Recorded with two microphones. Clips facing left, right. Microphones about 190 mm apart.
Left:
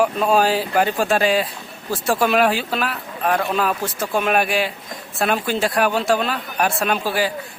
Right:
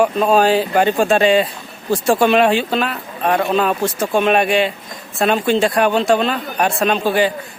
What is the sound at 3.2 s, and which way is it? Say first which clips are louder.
Speech: right 4 dB; 25° right (ahead or behind).